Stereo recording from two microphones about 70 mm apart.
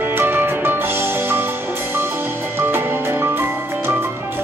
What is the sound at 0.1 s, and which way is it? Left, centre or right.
Music, right.